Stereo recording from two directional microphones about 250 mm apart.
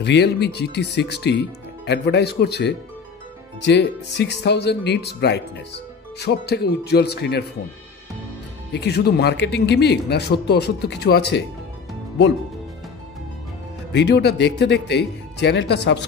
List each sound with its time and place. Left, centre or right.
0.0 s speech: left
8.7 s speech: left
13.9 s speech: left